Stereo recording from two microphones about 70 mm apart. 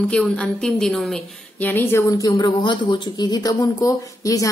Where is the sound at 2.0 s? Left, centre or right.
Left.